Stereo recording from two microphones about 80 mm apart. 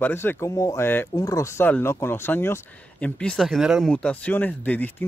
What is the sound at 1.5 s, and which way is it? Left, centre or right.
Speech, left.